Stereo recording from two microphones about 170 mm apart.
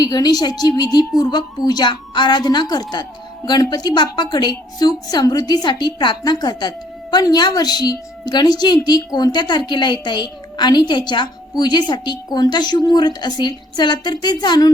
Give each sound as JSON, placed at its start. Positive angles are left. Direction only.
{"t": 0.0, "sound": "a woman's voice", "side_deg": 25}